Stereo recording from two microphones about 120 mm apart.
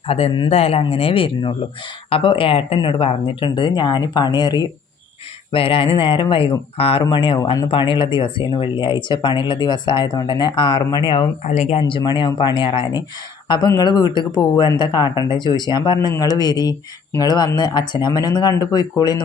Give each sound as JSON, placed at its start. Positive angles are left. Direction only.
{"t": 0.4, "sound": "speech", "side_deg": 55}
{"t": 5.5, "sound": "speech", "side_deg": 45}
{"t": 11.4, "sound": "speech", "side_deg": 65}
{"t": 11.8, "sound": "speech", "side_deg": 40}
{"t": 13.5, "sound": "speech", "side_deg": 35}